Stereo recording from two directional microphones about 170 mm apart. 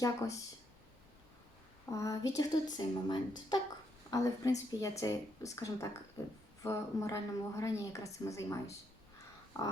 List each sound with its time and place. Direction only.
0.0 s speech: 20° left (ahead or behind)
1.9 s a woman's voice: 20° left (ahead or behind)